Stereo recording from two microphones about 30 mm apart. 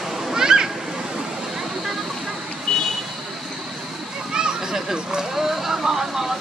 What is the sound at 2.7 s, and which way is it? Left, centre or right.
Vehicle, left.